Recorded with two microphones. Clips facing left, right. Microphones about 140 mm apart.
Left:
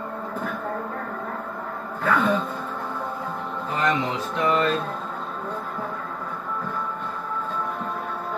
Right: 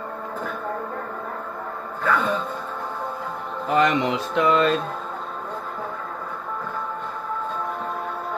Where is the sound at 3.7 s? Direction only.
80° right.